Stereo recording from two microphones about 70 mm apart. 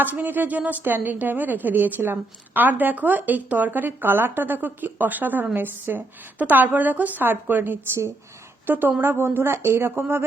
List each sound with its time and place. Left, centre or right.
0.0 s a woman's voice: right